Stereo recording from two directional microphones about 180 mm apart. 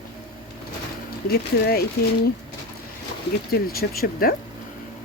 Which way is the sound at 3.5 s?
55° left (ahead or behind).